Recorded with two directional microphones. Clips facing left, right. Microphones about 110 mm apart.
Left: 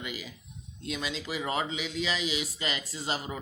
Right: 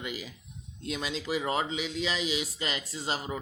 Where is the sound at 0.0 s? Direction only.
35° right (ahead or behind).